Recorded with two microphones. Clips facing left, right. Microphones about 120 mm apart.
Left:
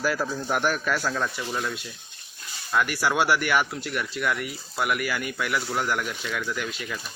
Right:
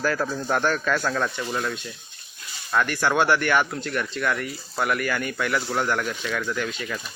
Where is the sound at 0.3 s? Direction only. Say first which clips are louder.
Right 2 dB; 5° right (ahead or behind).